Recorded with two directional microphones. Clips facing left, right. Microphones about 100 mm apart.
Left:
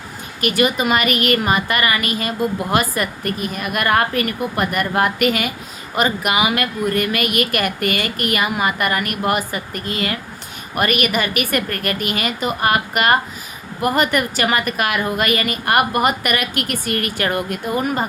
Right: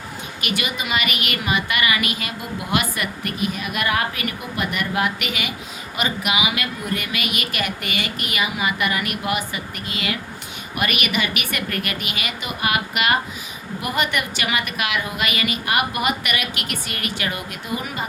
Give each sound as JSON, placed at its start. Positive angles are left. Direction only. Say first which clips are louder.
{"t": 0.4, "sound": "a woman's voice", "louder": "left 9 dB", "side_deg": 45}